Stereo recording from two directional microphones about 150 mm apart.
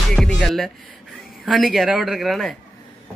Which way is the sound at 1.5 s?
Centre (ahead or behind).